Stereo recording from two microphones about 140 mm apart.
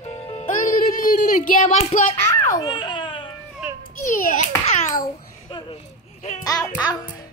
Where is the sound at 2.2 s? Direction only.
20° left (ahead or behind).